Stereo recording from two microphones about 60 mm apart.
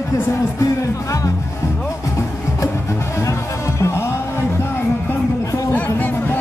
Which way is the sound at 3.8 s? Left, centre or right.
Left.